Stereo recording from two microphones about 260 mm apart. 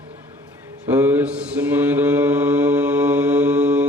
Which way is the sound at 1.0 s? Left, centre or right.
Centre.